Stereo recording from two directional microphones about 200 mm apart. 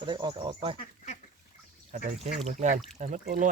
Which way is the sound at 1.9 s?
40° right (ahead or behind).